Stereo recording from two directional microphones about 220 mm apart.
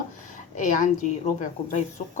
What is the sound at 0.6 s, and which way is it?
Speech, 35° left (ahead or behind).